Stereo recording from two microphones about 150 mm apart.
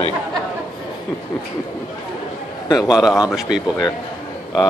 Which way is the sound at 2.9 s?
5° right (ahead or behind).